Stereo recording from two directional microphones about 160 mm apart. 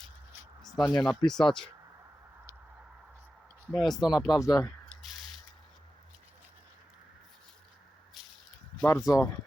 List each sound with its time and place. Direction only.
0.6 s speech: centre (ahead or behind)
3.7 s speech: centre (ahead or behind)
4.3 s speech: 20° left (ahead or behind)
4.6 s a sound: centre (ahead or behind)
8.8 s speech: 20° left (ahead or behind)